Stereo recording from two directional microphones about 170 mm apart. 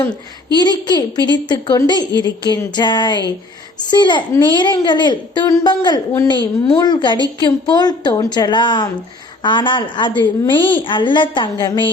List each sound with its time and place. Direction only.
0.5 s a woman's voice: 25° left (ahead or behind)